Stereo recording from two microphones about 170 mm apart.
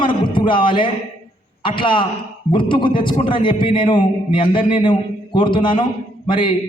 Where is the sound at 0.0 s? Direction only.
30° left (ahead or behind).